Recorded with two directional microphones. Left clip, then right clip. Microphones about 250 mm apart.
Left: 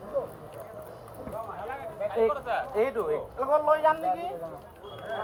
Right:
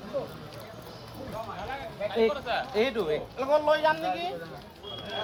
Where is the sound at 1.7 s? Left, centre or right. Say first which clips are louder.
Left 1 dB; right.